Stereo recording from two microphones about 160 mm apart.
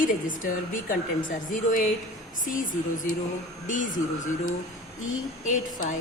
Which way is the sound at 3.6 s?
55° left (ahead or behind).